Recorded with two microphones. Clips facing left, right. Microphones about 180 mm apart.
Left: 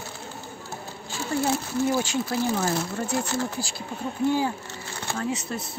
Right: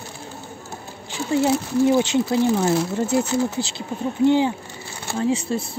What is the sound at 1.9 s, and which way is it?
Speech, 20° right (ahead or behind).